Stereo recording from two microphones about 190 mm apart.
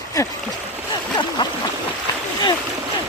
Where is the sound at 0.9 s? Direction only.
25° left (ahead or behind).